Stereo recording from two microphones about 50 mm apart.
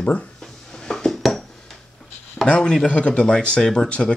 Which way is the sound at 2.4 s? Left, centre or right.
Left.